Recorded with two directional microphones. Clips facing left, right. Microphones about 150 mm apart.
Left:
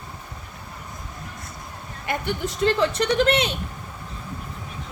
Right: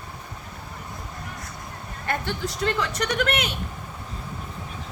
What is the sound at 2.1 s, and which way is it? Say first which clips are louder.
Speech: left 2 dB; 20° left (ahead or behind).